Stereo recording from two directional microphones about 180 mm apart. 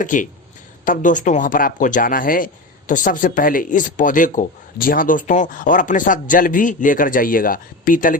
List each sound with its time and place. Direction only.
0.0 s speech: 45° left (ahead or behind)